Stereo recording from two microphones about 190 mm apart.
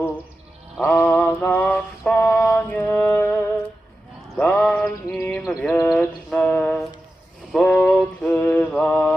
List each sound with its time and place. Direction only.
0.9 s male singing: 10° left (ahead or behind)
4.4 s a sound: 5° left (ahead or behind)
5.9 s music: 5° left (ahead or behind)
7.5 s mantra: 5° left (ahead or behind)